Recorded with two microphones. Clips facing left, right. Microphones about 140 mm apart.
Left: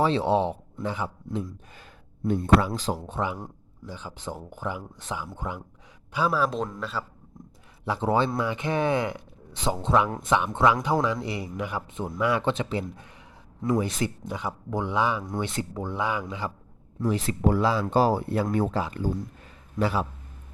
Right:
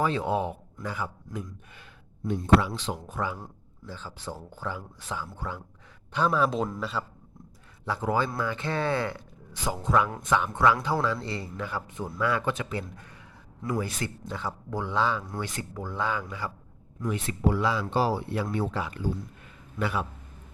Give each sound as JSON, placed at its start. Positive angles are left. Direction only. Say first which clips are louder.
{"t": 0.0, "sound": "speech", "louder": "left 4 dB", "side_deg": 30}
{"t": 2.2, "sound": "a man's voice", "louder": "left 1 dB", "side_deg": 50}
{"t": 6.1, "sound": "a man's voice", "louder": "even", "side_deg": 5}
{"t": 7.9, "sound": "a man's voice", "louder": "left 3 dB", "side_deg": 25}
{"t": 17.0, "sound": "speech", "louder": "left 3 dB", "side_deg": 35}
{"t": 17.9, "sound": "speech", "louder": "left 4 dB", "side_deg": 45}